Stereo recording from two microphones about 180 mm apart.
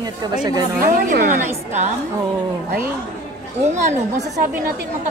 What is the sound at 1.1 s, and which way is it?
Speech, 45° right (ahead or behind).